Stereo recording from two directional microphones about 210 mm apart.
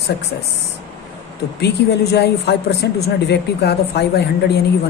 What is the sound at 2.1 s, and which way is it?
Speech, 50° left (ahead or behind).